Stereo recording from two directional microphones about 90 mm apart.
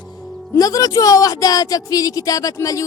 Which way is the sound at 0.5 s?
40° left (ahead or behind).